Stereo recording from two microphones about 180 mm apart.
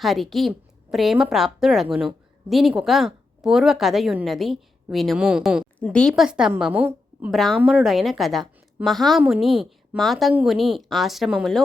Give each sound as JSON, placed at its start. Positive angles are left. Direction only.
{"t": 0.0, "sound": "a woman's voice", "side_deg": 0}
{"t": 7.3, "sound": "a woman's voice", "side_deg": 0}